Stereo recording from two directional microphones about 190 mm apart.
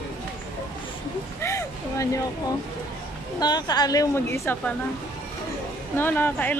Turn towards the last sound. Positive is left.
turn(degrees=10)  # may be behind; listen again after turning